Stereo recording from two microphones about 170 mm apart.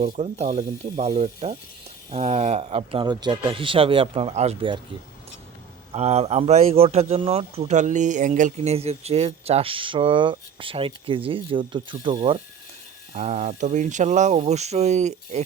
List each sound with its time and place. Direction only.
0.1 s speech: 45° right (ahead or behind)
5.9 s speech: 40° right (ahead or behind)
13.1 s speech: 40° right (ahead or behind)